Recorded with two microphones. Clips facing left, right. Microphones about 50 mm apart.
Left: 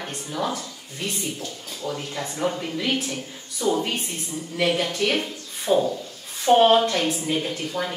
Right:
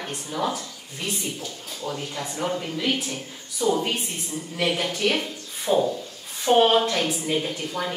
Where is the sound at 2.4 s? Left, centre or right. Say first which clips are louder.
Even; centre.